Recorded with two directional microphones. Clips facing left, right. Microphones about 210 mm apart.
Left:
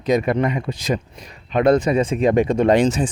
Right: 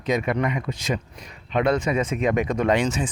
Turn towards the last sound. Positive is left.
turn(degrees=35)  # may be behind; listen again after turning